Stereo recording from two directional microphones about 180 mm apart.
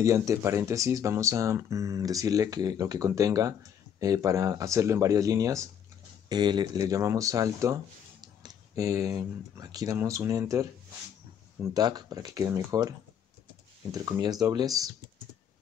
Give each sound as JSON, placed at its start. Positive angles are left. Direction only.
{"t": 0.0, "sound": "speech", "side_deg": -15}
{"t": 11.7, "sound": "speech", "side_deg": -20}
{"t": 13.9, "sound": "speech", "side_deg": -20}